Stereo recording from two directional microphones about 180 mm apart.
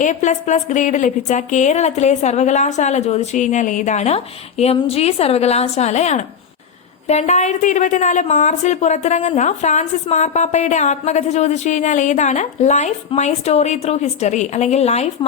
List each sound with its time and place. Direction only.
0.0 s a woman's voice: 45° left (ahead or behind)